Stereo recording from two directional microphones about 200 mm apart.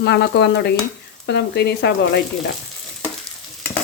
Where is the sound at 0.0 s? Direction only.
55° left (ahead or behind).